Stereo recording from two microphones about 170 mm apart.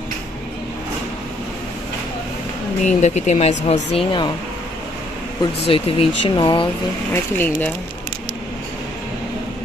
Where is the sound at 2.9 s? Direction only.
45° left (ahead or behind).